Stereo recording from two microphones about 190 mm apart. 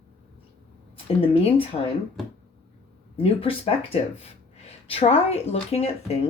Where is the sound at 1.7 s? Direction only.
30° left (ahead or behind).